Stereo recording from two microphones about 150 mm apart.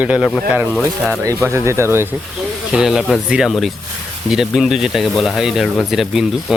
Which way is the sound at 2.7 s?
5° right (ahead or behind).